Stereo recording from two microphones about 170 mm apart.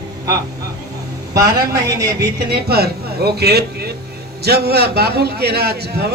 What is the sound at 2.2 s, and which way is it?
A man's voice, 70° right (ahead or behind).